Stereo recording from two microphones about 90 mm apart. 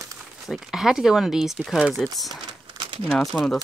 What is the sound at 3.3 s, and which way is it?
Speech, 15° left (ahead or behind).